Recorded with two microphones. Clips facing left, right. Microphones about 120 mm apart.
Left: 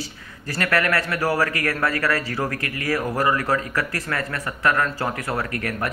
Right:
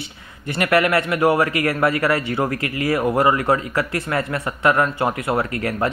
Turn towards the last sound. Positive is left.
turn(degrees=-25)  # may be behind; listen again after turning